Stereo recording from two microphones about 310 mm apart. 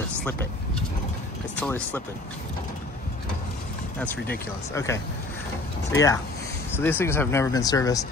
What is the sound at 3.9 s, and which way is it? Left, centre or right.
Speech, centre.